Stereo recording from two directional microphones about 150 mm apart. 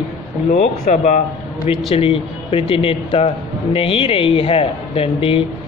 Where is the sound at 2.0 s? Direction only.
40° left (ahead or behind).